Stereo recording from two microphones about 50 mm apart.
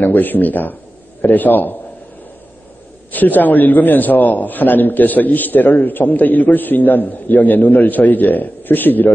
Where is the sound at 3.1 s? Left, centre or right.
Left.